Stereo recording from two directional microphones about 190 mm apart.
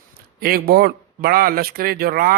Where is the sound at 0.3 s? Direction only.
55° right (ahead or behind).